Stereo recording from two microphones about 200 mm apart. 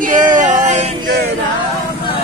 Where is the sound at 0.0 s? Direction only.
40° right (ahead or behind).